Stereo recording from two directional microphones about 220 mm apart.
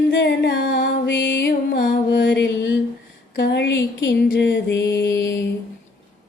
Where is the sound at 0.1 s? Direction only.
50° left (ahead or behind).